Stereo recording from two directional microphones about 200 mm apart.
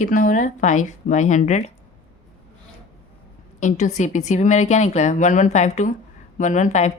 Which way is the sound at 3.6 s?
35° left (ahead or behind).